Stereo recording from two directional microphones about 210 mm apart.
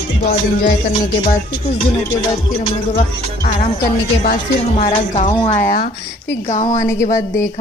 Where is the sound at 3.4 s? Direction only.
40° left (ahead or behind).